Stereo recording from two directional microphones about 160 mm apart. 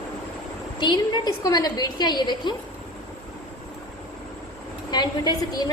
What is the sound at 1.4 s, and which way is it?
A woman's voice, 25° left (ahead or behind).